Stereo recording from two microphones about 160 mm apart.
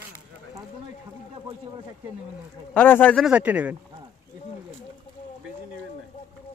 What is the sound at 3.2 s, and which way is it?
Speech, 10° right (ahead or behind).